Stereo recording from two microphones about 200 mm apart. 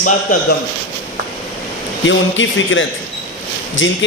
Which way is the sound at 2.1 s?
70° left (ahead or behind).